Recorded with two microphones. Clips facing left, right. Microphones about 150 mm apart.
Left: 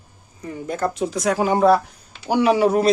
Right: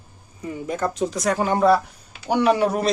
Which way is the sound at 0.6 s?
Centre (ahead or behind).